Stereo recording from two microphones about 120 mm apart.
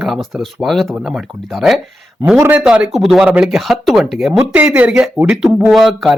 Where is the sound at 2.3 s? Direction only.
10° right (ahead or behind).